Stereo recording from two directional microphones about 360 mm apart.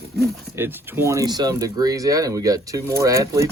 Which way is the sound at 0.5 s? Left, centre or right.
Centre.